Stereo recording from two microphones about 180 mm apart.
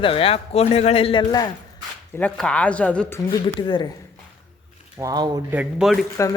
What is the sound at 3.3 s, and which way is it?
Speech, 25° left (ahead or behind).